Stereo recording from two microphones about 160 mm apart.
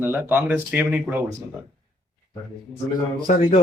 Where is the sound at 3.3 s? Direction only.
60° left (ahead or behind).